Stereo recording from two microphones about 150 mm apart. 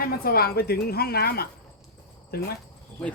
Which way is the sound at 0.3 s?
90° left.